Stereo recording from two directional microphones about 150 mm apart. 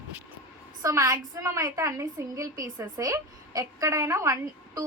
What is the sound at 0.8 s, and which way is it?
A woman's voice, 20° right (ahead or behind).